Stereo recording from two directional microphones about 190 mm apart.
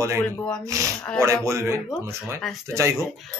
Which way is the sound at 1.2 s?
15° right (ahead or behind).